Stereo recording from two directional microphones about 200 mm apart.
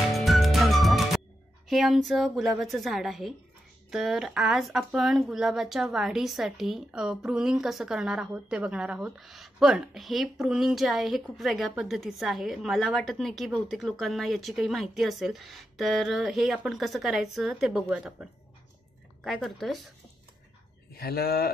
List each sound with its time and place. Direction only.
0.1 s music: centre (ahead or behind)
1.7 s speech: centre (ahead or behind)
19.2 s speech: centre (ahead or behind)
20.9 s speech: 50° left (ahead or behind)